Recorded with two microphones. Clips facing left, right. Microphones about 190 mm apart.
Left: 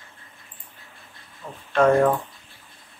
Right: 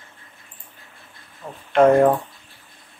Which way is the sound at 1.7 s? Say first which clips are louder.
Right 4 dB; 20° right (ahead or behind).